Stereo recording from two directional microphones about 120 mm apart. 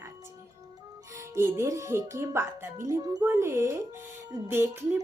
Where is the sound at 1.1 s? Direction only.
25° right (ahead or behind).